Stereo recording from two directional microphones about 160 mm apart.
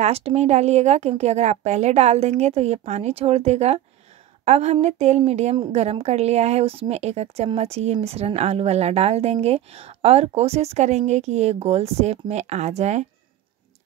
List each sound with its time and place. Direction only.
0.0 s a woman's voice: 40° right (ahead or behind)